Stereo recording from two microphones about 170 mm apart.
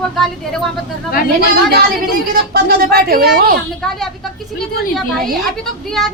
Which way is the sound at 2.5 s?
65° right (ahead or behind).